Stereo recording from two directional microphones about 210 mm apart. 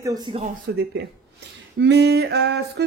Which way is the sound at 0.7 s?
50° right (ahead or behind).